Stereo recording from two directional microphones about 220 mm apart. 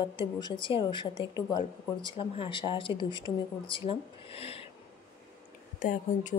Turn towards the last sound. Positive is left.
turn(degrees=35)  # may be behind; listen again after turning